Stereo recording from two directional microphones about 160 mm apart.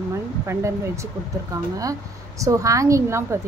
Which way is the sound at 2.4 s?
20° right (ahead or behind).